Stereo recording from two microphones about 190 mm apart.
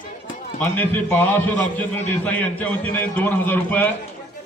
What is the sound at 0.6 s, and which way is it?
A man's voice, 10° left (ahead or behind).